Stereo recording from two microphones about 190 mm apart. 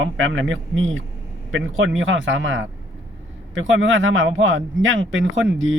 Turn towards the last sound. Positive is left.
turn(degrees=-90)